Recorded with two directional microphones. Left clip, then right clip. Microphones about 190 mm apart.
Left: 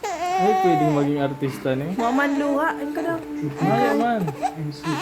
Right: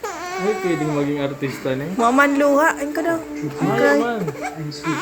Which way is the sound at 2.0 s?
20° right (ahead or behind).